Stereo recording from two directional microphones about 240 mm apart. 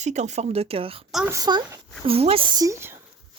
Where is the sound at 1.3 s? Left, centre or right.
Centre.